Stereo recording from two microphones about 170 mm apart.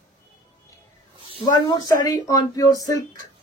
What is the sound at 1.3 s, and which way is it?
Speech, 25° left (ahead or behind).